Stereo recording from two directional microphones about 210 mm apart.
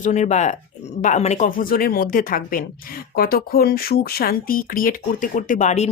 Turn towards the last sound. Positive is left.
turn(degrees=35)  # may be behind; listen again after turning